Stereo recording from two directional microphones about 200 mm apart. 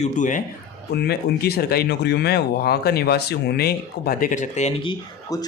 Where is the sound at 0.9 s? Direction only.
55° left (ahead or behind).